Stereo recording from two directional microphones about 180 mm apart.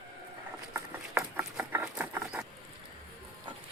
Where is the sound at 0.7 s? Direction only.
10° right (ahead or behind).